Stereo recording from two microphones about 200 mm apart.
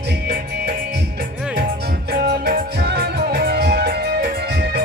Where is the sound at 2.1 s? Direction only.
55° right (ahead or behind).